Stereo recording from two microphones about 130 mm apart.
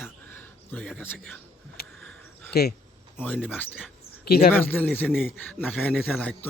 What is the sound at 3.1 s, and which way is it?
Speech, 10° left (ahead or behind).